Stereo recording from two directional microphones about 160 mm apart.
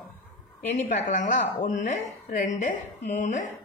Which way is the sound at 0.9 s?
50° left (ahead or behind).